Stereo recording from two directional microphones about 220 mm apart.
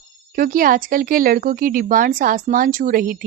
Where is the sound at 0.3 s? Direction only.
40° right (ahead or behind).